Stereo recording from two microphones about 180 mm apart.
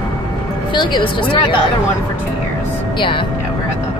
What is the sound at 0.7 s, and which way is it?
Speech, 25° left (ahead or behind).